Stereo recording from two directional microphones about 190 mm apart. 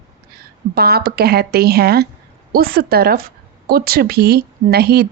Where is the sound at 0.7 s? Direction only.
55° right (ahead or behind).